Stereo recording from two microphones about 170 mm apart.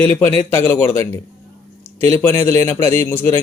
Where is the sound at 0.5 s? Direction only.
15° left (ahead or behind).